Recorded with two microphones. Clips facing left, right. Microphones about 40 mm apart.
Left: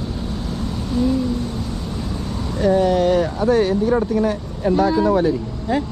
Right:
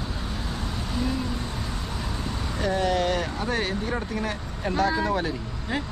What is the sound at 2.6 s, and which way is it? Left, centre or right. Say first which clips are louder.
Speech: left 8 dB; centre.